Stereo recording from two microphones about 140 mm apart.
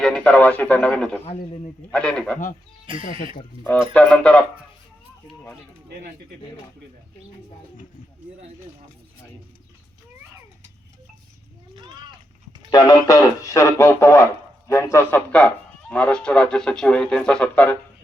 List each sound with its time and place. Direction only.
0.0 s speech: 10° left (ahead or behind)
1.2 s a man's voice: 40° left (ahead or behind)
1.9 s speech: 5° left (ahead or behind)
2.9 s speech: 40° right (ahead or behind)
3.9 s speech: 10° left (ahead or behind)
12.7 s speech: 30° left (ahead or behind); by 17.7 s 10° left (ahead or behind)